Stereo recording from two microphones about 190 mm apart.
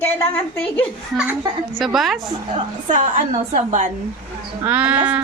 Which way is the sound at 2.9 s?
40° right (ahead or behind).